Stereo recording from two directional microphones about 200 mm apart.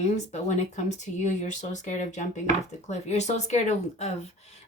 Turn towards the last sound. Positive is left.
turn(degrees=35)  # may be behind; listen again after turning